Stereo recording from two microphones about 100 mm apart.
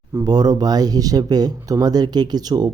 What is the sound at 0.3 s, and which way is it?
Speech, 40° right (ahead or behind).